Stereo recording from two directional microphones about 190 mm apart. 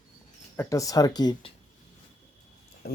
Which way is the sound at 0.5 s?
15° left (ahead or behind).